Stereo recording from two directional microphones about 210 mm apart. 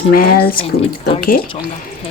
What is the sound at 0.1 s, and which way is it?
Speech, 45° left (ahead or behind).